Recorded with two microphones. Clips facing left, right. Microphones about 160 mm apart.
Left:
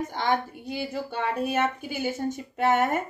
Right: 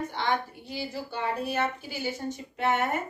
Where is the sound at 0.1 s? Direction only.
45° left (ahead or behind).